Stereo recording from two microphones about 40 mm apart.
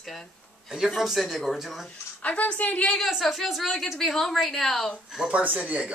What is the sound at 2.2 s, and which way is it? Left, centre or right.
Speech, left.